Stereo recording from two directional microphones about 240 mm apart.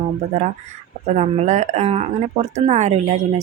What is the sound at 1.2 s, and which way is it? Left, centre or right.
Speech, right.